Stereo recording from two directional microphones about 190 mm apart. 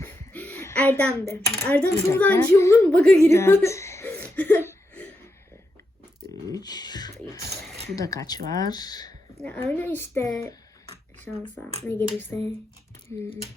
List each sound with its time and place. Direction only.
0.0 s a sound: 10° left (ahead or behind)
1.5 s a woman's voice: 10° left (ahead or behind)
3.2 s whimper: 15° left (ahead or behind)
6.5 s a woman's voice: 20° left (ahead or behind)
9.4 s a woman's voice: 10° left (ahead or behind)
11.9 s a woman's voice: 10° left (ahead or behind)